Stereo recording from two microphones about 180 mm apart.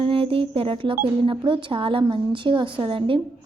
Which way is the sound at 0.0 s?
30° right (ahead or behind).